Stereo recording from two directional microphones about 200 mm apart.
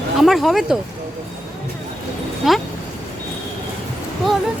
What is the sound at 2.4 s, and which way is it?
Speech, centre (ahead or behind).